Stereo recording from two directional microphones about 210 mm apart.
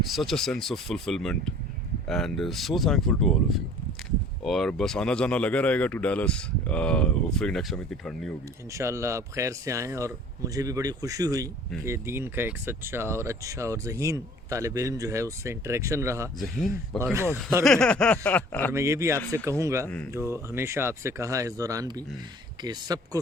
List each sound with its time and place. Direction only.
0.1 s speech: centre (ahead or behind)
8.7 s speech: 15° right (ahead or behind)
17.7 s a sound: 5° left (ahead or behind)
18.7 s speech: 15° right (ahead or behind)